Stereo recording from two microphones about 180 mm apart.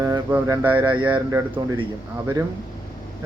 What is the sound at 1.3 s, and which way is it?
Speech, 15° right (ahead or behind).